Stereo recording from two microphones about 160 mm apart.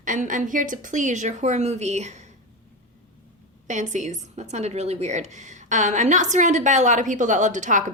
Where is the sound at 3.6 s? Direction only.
50° right (ahead or behind).